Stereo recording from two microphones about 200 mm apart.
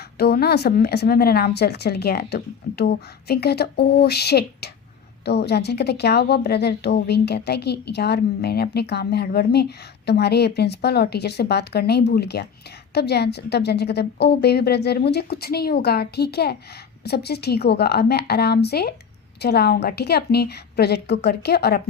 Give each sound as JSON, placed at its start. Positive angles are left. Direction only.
{"t": 0.2, "sound": "a woman's voice", "side_deg": 55}